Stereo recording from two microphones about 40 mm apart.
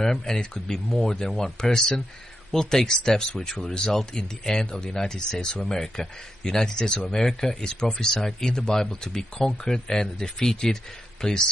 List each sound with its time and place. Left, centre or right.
0.0 s speech: centre